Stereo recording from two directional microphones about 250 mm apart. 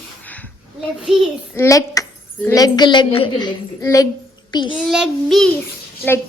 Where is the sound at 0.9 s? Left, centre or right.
Centre.